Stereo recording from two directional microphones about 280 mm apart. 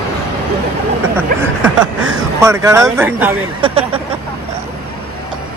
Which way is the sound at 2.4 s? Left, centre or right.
Centre.